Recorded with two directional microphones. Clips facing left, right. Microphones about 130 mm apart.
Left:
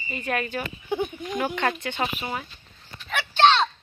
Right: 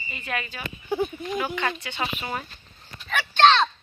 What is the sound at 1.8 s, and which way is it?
Speech, 55° left (ahead or behind).